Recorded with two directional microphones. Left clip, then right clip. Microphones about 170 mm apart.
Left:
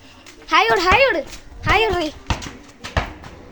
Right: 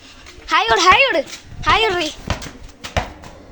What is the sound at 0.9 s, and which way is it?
Speech, 40° right (ahead or behind).